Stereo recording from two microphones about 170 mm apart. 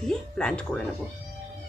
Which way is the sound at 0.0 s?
5° left (ahead or behind).